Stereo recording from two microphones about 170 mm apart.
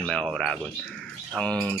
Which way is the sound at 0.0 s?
5° left (ahead or behind).